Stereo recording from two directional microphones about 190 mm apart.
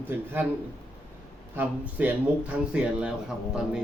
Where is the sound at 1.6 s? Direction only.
10° right (ahead or behind).